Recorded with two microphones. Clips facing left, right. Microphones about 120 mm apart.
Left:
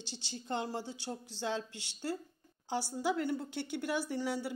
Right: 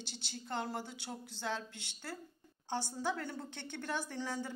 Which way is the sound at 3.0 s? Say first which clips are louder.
Left 5 dB; 10° left (ahead or behind).